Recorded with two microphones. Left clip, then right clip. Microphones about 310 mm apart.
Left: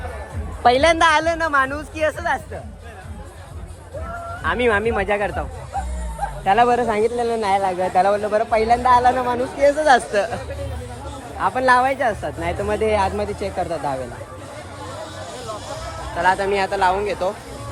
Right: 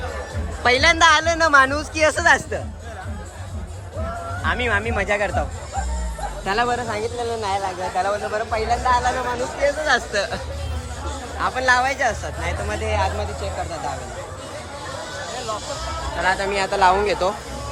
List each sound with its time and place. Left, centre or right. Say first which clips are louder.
0.6 s speech: left 1 dB; centre
4.4 s speech: left 3 dB; centre
6.9 s speech: left 5 dB; left
7.4 s speech: left 6 dB; centre
11.3 s speech: left 2 dB; centre
16.2 s speech: left 3 dB; centre